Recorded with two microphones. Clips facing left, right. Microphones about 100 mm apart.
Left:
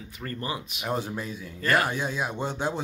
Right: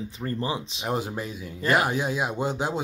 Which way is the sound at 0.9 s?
15° right (ahead or behind).